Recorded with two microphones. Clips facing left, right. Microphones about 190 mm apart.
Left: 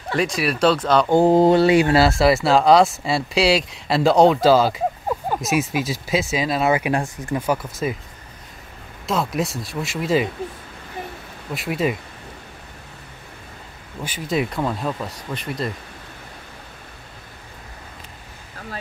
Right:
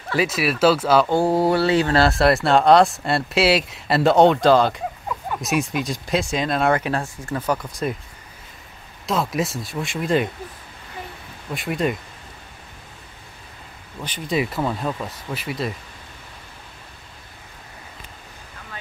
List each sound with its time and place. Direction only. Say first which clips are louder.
0.1 s speech: even; 5° right (ahead or behind)
1.0 s mantra: left 4 dB; 20° left (ahead or behind)
2.0 s speech: left 1 dB; centre (ahead or behind)
9.0 s speech: even; centre (ahead or behind)
11.5 s speech: left 1 dB; centre (ahead or behind)
14.0 s speech: even; 5° left (ahead or behind)